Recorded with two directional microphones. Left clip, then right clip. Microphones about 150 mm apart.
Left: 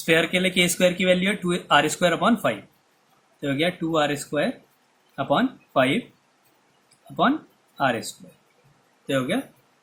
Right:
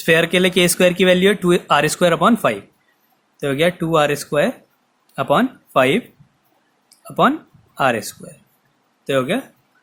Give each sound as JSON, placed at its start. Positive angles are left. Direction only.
{"t": 0.0, "sound": "speech", "side_deg": -75}
{"t": 3.4, "sound": "speech", "side_deg": -85}
{"t": 7.8, "sound": "speech", "side_deg": -85}
{"t": 9.0, "sound": "speech", "side_deg": -70}